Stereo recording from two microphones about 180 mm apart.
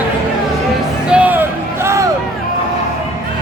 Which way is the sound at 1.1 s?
5° right (ahead or behind).